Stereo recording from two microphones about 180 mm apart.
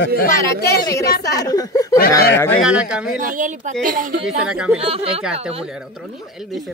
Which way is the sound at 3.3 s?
45° right (ahead or behind).